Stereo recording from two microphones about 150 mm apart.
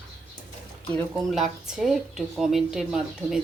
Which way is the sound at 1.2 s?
Centre (ahead or behind).